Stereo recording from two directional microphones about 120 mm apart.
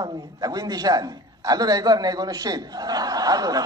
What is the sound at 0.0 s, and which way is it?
A man's voice, 35° right (ahead or behind).